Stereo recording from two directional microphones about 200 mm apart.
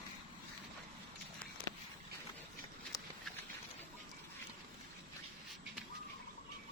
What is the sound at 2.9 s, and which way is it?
Patter, 20° left (ahead or behind).